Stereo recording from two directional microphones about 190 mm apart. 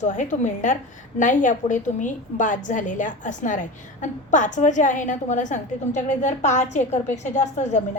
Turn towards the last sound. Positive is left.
turn(degrees=40)  # may be behind; listen again after turning